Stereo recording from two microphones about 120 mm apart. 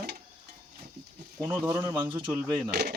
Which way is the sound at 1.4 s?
20° right (ahead or behind).